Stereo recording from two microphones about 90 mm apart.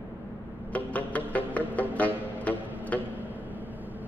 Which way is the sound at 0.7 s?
15° left (ahead or behind).